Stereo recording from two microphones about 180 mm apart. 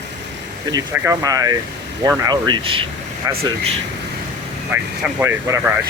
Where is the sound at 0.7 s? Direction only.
20° right (ahead or behind).